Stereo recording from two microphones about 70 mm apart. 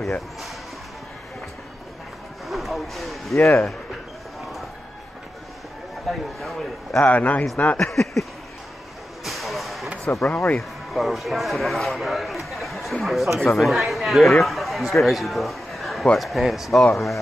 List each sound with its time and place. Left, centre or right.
2.4 s speech: centre
3.3 s speech: left
6.0 s speech: centre
7.0 s a man's voice: left
7.7 s speech: centre
9.2 s a sound: centre
10.2 s a man's voice: left
10.9 s speech: centre